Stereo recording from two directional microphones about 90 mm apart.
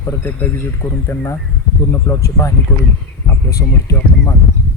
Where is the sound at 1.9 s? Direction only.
35° left (ahead or behind).